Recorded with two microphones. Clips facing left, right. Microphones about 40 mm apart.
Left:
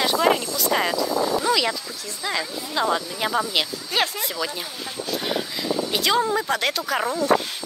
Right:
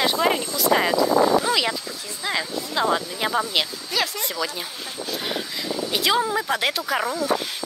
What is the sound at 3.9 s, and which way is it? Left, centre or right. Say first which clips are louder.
Speech: left 2 dB; left.